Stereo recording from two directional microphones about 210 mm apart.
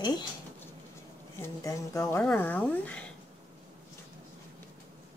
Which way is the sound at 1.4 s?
15° left (ahead or behind).